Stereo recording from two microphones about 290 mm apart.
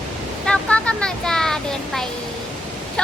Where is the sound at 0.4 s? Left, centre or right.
Centre.